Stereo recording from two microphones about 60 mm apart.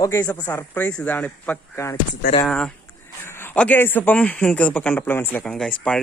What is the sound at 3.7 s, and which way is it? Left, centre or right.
Speech, left.